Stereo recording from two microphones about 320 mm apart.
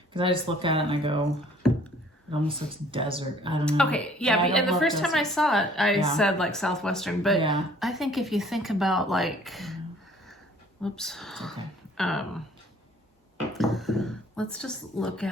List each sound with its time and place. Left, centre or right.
0.1 s speech: centre
2.9 s speech: centre
3.7 s speech: centre
10.8 s speech: centre
13.5 s speech: centre